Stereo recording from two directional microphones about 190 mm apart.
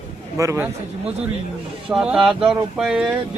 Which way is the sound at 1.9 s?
5° right (ahead or behind).